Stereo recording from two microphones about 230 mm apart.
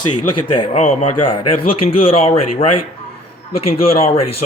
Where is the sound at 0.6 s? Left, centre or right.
Left.